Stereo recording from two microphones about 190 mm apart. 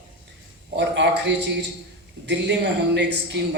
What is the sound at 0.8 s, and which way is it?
A man's voice, 65° right (ahead or behind).